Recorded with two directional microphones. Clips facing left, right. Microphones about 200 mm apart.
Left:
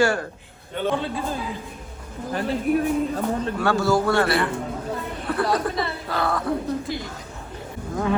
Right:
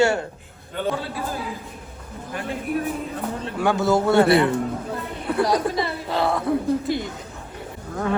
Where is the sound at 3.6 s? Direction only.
20° right (ahead or behind).